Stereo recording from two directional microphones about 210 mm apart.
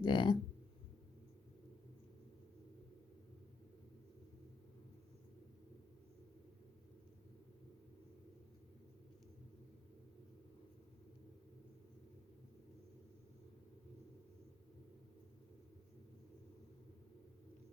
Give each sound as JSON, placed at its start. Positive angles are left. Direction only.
{"t": 0.0, "sound": "speech", "side_deg": 20}